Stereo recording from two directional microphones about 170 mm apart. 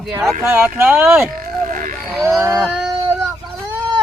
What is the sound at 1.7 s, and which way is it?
Wild animals, 50° right (ahead or behind).